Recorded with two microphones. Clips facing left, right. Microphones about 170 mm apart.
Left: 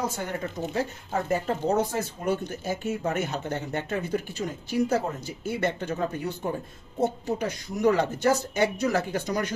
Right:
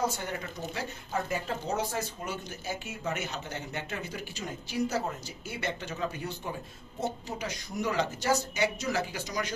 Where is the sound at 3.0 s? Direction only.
55° left (ahead or behind).